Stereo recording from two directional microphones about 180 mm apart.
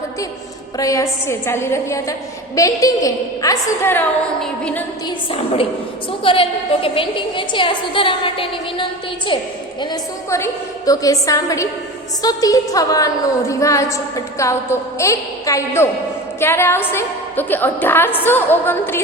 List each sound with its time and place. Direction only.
0.8 s a woman's voice: 20° left (ahead or behind)
4.4 s a sound: 5° left (ahead or behind)
5.0 s a woman's voice: 30° left (ahead or behind); by 19.0 s 10° left (ahead or behind)